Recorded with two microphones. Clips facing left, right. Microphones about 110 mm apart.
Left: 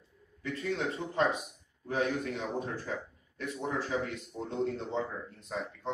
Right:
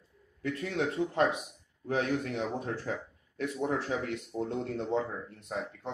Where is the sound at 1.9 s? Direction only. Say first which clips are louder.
Right 1 dB; 65° right (ahead or behind).